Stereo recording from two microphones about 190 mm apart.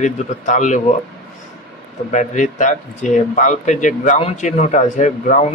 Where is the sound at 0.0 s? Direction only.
40° left (ahead or behind).